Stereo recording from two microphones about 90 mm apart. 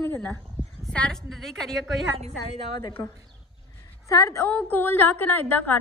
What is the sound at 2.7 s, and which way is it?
Speech, 70° left (ahead or behind).